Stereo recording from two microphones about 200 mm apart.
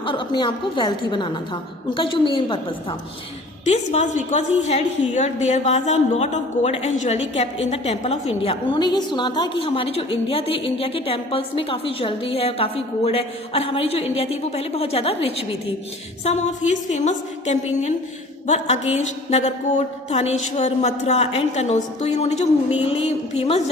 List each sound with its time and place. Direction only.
0.0 s a woman's voice: 25° left (ahead or behind)
3.7 s a woman's voice: 35° left (ahead or behind)